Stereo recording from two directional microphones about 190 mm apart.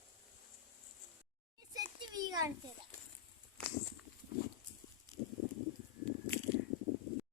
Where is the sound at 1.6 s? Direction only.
20° right (ahead or behind).